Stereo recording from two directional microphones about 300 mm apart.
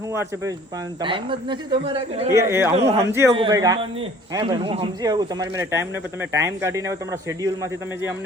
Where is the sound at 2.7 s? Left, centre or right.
Right.